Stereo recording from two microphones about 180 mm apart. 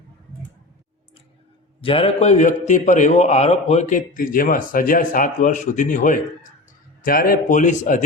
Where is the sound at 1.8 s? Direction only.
30° left (ahead or behind).